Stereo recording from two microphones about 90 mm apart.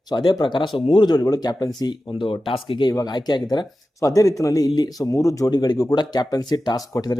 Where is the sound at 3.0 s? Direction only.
50° left (ahead or behind).